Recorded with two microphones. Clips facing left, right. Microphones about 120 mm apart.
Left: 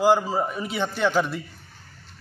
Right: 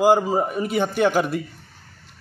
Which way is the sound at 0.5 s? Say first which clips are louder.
Right 6 dB; 50° right (ahead or behind).